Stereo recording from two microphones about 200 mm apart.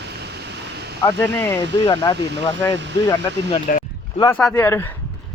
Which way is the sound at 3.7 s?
40° left (ahead or behind).